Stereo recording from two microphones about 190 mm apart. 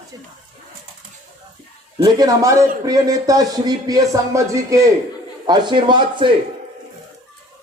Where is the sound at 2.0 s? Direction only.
20° right (ahead or behind).